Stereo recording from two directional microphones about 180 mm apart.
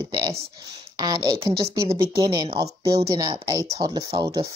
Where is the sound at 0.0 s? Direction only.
20° right (ahead or behind).